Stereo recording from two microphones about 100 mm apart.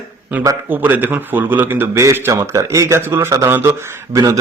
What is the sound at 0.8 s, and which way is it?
A man's voice, 20° right (ahead or behind).